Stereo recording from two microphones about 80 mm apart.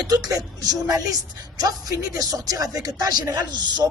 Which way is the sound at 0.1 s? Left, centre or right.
Right.